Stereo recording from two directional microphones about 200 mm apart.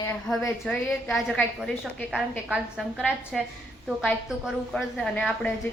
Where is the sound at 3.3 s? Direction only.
Centre (ahead or behind).